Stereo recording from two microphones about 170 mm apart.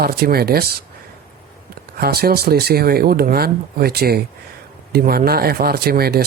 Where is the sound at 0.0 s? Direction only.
65° right (ahead or behind).